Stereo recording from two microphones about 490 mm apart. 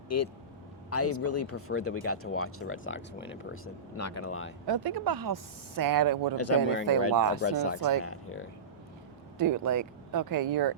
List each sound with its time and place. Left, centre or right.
0.1 s speech: left
4.6 s speech: right
6.3 s speech: left
6.9 s speech: right
7.3 s speech: left
9.4 s speech: right